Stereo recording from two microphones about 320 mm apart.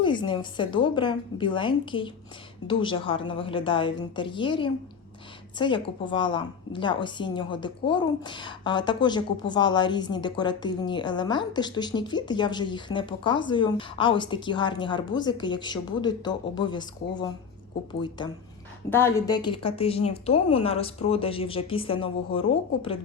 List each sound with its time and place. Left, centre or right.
0.0 s a woman's voice: centre
18.9 s a woman's voice: centre